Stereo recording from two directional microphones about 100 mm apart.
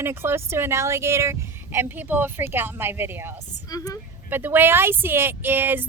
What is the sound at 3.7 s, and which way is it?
Speech, 35° left (ahead or behind).